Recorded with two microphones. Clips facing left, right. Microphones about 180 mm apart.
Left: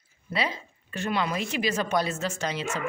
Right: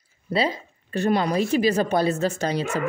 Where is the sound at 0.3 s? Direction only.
35° right (ahead or behind).